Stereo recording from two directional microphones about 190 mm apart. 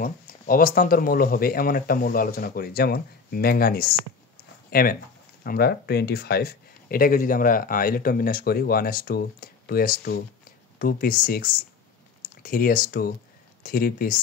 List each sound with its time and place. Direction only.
0.0 s speech: 50° left (ahead or behind)